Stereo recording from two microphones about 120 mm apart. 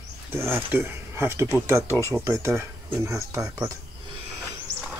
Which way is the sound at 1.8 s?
20° left (ahead or behind).